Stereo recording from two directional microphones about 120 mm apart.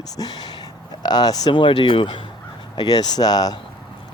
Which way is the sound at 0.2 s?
35° left (ahead or behind).